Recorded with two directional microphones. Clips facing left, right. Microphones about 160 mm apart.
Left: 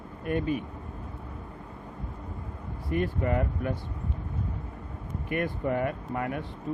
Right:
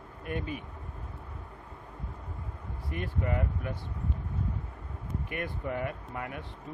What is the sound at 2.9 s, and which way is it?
Speech, 50° left (ahead or behind).